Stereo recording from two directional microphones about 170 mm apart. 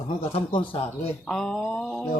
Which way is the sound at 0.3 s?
35° left (ahead or behind).